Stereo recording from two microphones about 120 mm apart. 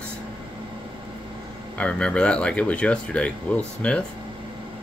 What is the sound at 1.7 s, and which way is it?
Speech, 10° left (ahead or behind).